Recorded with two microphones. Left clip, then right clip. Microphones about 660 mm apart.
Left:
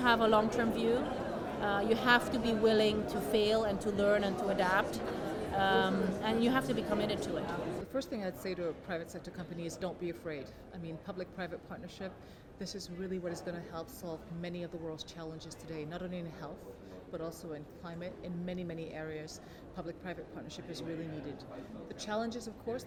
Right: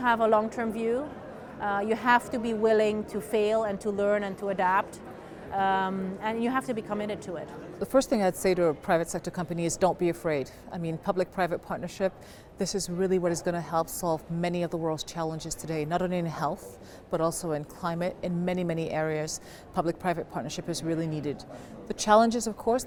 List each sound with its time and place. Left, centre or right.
0.0 s a woman's voice: right
7.9 s a woman's voice: right